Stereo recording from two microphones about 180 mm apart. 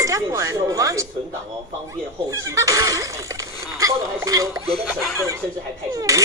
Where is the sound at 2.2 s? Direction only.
15° right (ahead or behind).